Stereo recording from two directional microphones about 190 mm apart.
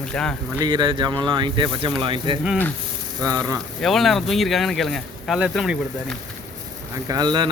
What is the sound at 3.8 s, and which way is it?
Speech, centre (ahead or behind).